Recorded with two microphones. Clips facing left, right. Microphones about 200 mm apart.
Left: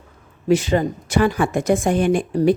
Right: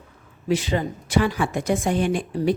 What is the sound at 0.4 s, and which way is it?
Speech, 45° left (ahead or behind).